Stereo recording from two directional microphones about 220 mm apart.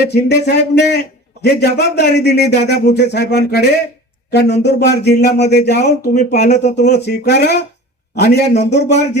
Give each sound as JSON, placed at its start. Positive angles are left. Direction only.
{"t": 0.0, "sound": "speech", "side_deg": 50}